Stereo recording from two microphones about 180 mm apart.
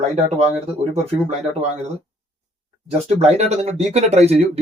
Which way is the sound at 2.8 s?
40° right (ahead or behind).